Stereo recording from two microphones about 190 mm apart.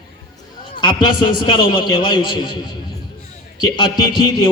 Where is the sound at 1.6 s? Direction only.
20° left (ahead or behind).